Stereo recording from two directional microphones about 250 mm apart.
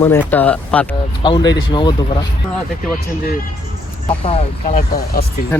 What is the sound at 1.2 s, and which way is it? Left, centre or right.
Speech, centre.